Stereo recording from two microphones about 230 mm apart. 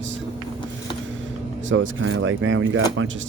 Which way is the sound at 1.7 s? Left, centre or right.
Right.